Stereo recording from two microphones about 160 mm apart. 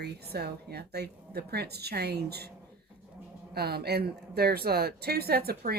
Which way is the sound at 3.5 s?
80° right.